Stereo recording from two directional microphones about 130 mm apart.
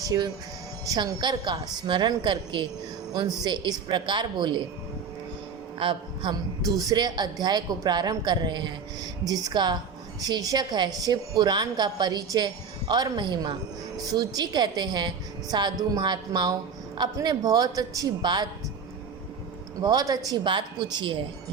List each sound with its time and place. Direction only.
0.0 s a woman's voice: 30° right (ahead or behind)
5.8 s a woman's voice: 40° right (ahead or behind)
19.8 s a woman's voice: 30° right (ahead or behind)